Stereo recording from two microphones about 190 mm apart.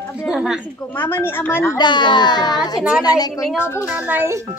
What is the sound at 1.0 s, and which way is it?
A child's voice, 10° left (ahead or behind).